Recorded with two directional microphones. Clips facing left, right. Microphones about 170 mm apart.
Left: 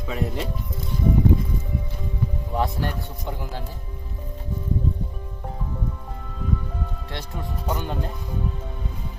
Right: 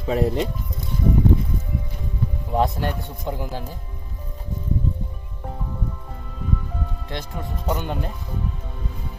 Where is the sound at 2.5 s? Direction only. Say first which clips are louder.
Right 4 dB; 20° right (ahead or behind).